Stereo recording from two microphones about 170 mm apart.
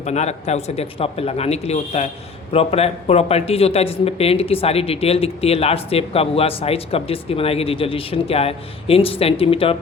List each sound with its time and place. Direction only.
0.0 s speech: 40° left (ahead or behind)